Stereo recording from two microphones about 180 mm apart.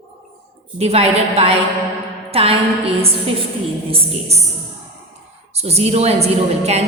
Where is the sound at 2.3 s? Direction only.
35° right (ahead or behind).